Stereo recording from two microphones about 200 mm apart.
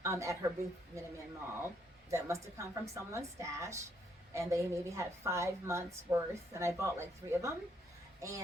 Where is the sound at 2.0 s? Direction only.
15° right (ahead or behind).